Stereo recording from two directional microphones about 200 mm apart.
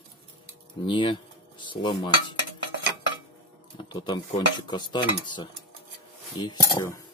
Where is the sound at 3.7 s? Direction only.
25° left (ahead or behind).